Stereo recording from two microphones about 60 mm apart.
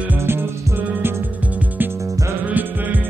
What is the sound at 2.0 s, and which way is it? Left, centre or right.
Music, right.